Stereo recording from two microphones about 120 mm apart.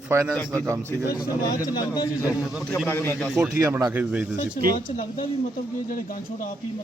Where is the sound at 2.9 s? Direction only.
20° left (ahead or behind).